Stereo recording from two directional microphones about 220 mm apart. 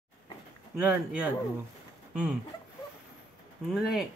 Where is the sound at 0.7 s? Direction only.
5° right (ahead or behind).